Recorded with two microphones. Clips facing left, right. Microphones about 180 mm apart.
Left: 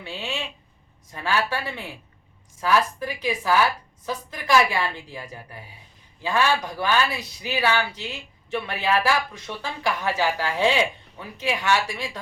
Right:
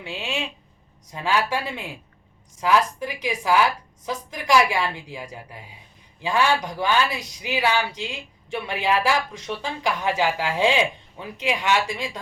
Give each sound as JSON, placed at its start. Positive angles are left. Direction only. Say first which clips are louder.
{"t": 0.0, "sound": "a woman's voice", "louder": "right 2 dB", "side_deg": -15}